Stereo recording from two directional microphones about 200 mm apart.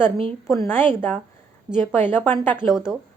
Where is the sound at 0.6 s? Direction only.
10° left (ahead or behind).